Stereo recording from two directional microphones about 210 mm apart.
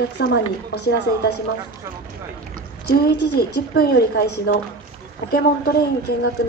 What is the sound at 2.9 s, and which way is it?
A woman's voice, 50° left (ahead or behind).